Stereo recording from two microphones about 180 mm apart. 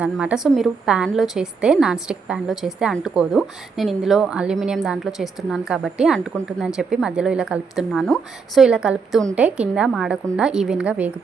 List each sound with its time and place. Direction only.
0.0 s a woman's voice: 5° right (ahead or behind)